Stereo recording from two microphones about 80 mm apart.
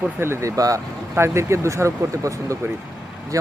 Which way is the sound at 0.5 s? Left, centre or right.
Right.